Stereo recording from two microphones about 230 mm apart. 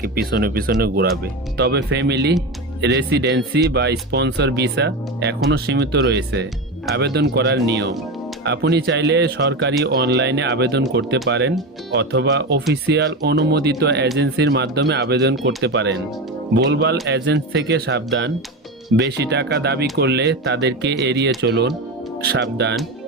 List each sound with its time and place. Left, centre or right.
0.0 s speech: right